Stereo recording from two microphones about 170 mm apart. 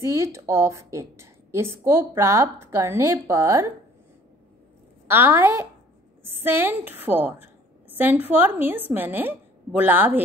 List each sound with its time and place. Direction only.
0.0 s a woman's voice: 15° right (ahead or behind)
5.0 s a woman's voice: 15° right (ahead or behind)